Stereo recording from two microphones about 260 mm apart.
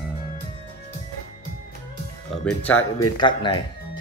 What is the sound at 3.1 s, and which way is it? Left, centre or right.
Speech, centre.